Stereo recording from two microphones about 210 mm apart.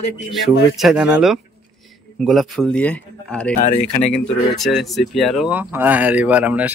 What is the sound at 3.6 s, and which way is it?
Speech, 35° left (ahead or behind).